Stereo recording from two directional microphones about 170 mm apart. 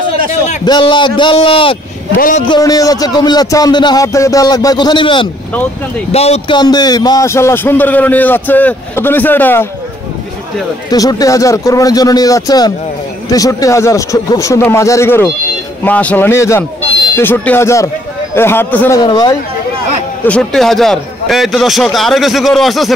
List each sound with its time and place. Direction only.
0.7 s a man's voice: 30° left (ahead or behind)
2.1 s a man's voice: 55° left (ahead or behind)
2.4 s a man's voice: 25° left (ahead or behind)
10.9 s a man's voice: 20° left (ahead or behind)
18.9 s a man's voice: 25° left (ahead or behind)
20.2 s a man's voice: 5° left (ahead or behind)